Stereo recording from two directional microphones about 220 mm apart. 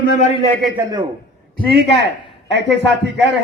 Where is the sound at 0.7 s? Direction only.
15° right (ahead or behind).